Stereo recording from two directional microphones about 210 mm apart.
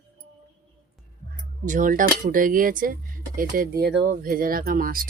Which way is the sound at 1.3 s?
40° right (ahead or behind).